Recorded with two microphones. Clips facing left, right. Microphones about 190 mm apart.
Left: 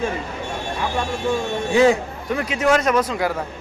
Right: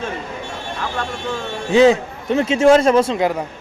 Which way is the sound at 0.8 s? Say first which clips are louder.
Left 2 dB; 10° left (ahead or behind).